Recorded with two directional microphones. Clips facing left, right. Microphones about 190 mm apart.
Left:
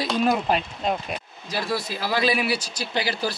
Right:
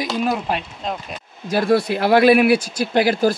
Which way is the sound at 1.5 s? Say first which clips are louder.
Right 10 dB; 55° right (ahead or behind).